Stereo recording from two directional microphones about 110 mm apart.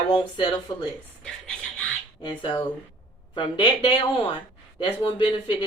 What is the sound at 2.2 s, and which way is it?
Speech, 45° left (ahead or behind).